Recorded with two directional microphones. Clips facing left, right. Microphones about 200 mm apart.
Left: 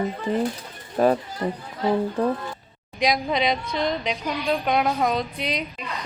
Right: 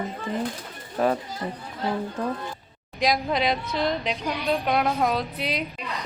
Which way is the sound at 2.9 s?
Centre (ahead or behind).